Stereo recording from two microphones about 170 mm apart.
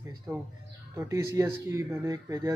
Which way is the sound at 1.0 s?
15° right (ahead or behind).